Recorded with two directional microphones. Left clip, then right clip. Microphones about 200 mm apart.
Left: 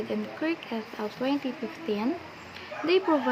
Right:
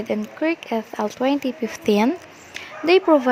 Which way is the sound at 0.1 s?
45° right (ahead or behind).